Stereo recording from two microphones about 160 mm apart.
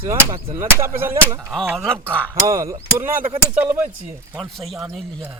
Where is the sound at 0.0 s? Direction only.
15° right (ahead or behind).